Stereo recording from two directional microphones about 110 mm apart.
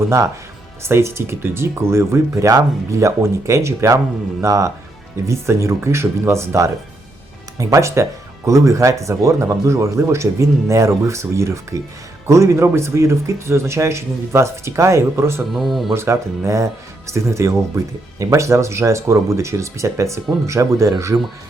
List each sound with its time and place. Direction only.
0.0 s speech: 25° right (ahead or behind)
15.5 s speech: centre (ahead or behind)
15.9 s speech: 25° right (ahead or behind)